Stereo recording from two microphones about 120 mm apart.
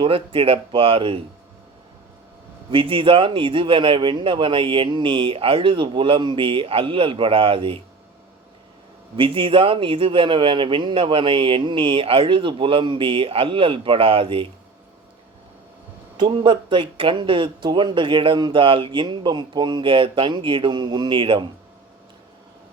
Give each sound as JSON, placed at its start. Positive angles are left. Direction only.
{"t": 0.0, "sound": "speech", "side_deg": -50}
{"t": 2.6, "sound": "speech", "side_deg": -45}
{"t": 9.1, "sound": "speech", "side_deg": -45}
{"t": 16.2, "sound": "speech", "side_deg": -40}